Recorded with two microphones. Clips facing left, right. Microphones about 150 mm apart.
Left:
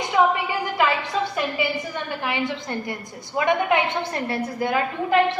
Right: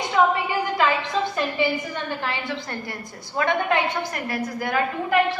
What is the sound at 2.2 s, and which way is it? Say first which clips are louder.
A woman's voice: left 3 dB; 15° left (ahead or behind).